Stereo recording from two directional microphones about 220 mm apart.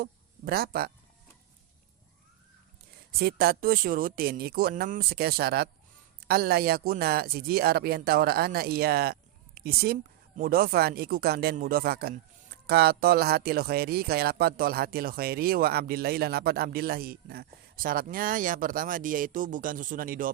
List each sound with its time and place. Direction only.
0.0 s speech: 45° right (ahead or behind)
3.1 s speech: 45° right (ahead or behind)